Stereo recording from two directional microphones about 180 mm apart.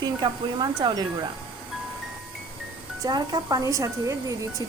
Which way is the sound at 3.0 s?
20° right (ahead or behind).